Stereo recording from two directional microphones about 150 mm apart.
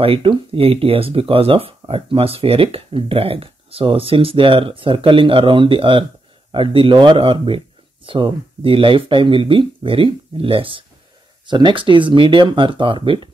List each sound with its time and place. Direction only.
0.0 s speech: 35° right (ahead or behind)